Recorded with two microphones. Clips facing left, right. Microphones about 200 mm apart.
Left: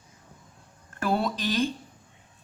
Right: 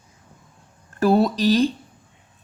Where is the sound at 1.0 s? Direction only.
40° right (ahead or behind).